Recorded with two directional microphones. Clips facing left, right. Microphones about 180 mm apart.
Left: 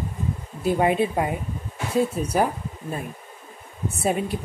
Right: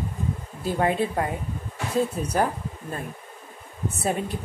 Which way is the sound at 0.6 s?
15° left (ahead or behind).